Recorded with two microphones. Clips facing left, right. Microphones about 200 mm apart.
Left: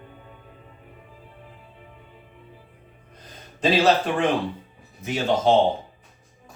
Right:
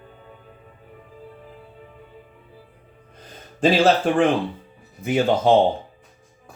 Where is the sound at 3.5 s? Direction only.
50° right (ahead or behind).